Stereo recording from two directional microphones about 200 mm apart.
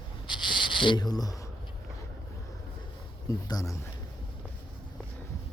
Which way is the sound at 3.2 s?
15° left (ahead or behind).